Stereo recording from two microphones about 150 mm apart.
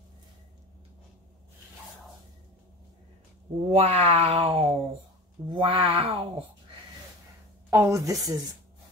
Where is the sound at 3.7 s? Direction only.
45° right (ahead or behind).